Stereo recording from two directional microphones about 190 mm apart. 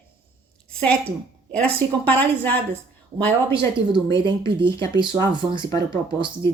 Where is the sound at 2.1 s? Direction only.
10° left (ahead or behind).